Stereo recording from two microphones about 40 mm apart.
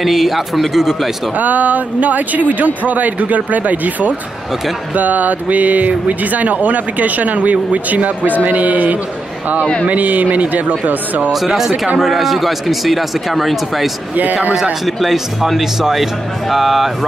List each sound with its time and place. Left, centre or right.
0.0 s speech: centre
1.4 s speech: right
11.3 s speech: centre
14.5 s speech: centre